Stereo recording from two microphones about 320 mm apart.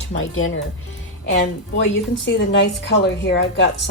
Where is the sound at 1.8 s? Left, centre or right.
Left.